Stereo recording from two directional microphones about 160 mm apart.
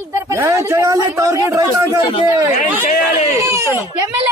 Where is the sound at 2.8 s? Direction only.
55° left (ahead or behind).